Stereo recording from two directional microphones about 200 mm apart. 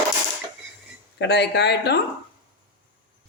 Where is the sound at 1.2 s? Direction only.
60° left (ahead or behind).